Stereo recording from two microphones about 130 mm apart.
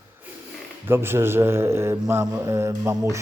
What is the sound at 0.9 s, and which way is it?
Mantra, 20° right (ahead or behind).